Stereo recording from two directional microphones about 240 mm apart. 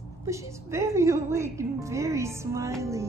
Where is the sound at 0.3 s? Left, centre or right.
Centre.